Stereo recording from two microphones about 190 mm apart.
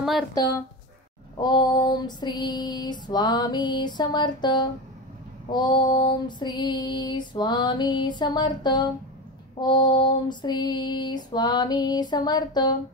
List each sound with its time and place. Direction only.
0.3 s female singing: 20° left (ahead or behind)